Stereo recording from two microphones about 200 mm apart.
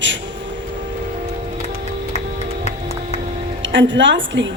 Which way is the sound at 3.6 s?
65° right (ahead or behind).